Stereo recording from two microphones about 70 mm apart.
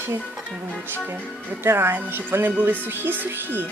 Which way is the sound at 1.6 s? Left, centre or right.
Right.